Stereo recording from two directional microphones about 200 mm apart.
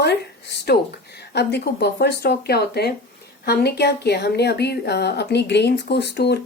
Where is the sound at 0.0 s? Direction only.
55° left (ahead or behind).